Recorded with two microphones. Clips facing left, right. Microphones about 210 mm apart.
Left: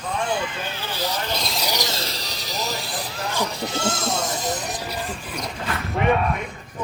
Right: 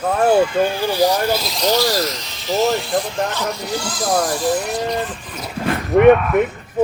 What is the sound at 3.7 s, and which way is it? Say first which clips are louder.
Speech: right 6 dB; 25° left (ahead or behind).